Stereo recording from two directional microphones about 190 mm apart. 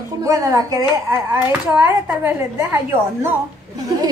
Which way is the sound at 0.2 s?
15° right (ahead or behind).